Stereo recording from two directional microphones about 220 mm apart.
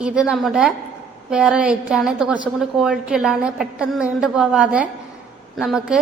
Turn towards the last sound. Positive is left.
turn(degrees=-5)  # may be behind; listen again after turning